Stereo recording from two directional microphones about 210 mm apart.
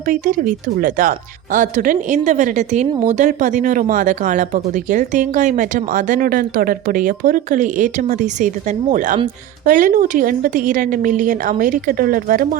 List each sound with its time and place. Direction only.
0.1 s speech: 40° right (ahead or behind)